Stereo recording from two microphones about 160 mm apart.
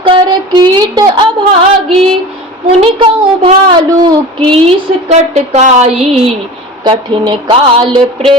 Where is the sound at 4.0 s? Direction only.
30° right (ahead or behind).